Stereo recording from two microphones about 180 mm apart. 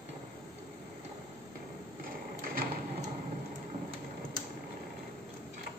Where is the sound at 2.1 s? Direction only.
50° right (ahead or behind).